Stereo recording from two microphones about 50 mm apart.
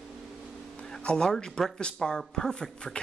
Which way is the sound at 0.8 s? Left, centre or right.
Centre.